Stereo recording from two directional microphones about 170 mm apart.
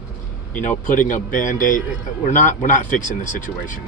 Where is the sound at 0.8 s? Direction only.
50° left (ahead or behind).